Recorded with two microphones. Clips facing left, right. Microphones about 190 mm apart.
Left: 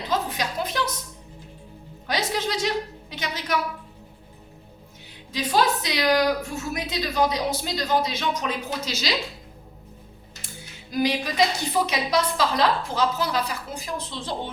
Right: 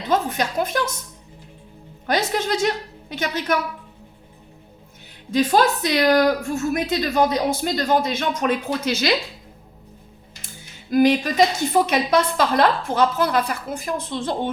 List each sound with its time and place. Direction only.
0.1 s a woman's voice: 50° right (ahead or behind)
2.0 s a woman's voice: 50° right (ahead or behind)
5.3 s a woman's voice: 50° right (ahead or behind)
10.9 s a woman's voice: 55° right (ahead or behind)